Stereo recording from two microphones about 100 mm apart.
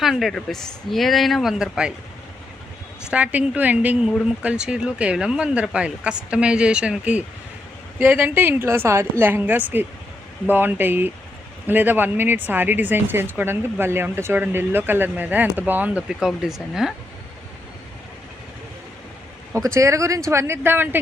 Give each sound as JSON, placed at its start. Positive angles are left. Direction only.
{"t": 0.0, "sound": "speech", "side_deg": 0}
{"t": 3.1, "sound": "speech", "side_deg": -15}
{"t": 16.0, "sound": "speech", "side_deg": -5}
{"t": 19.5, "sound": "speech", "side_deg": -30}